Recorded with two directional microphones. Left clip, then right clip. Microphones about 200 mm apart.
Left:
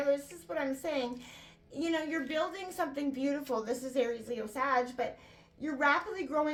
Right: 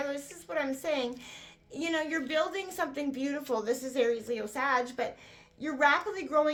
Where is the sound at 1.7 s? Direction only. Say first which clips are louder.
Right 2 dB; 35° right (ahead or behind).